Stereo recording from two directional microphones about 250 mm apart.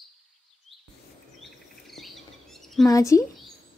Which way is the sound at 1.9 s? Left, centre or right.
Centre.